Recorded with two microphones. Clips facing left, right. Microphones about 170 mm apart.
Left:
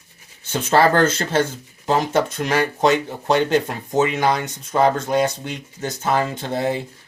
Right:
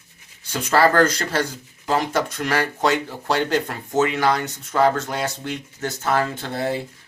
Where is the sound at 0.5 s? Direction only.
25° left (ahead or behind).